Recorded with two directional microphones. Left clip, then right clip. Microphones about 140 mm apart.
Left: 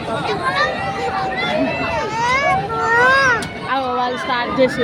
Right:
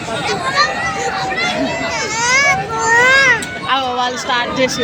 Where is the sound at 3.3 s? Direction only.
15° left (ahead or behind).